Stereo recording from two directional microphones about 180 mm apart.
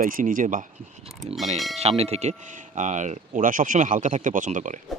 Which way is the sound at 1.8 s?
35° right (ahead or behind).